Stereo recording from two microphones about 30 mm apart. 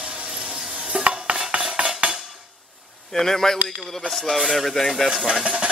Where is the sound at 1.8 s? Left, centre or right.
Right.